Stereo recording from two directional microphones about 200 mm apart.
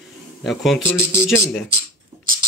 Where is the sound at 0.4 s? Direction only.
Centre (ahead or behind).